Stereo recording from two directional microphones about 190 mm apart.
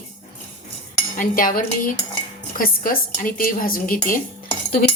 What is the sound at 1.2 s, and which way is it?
Speech, 45° left (ahead or behind).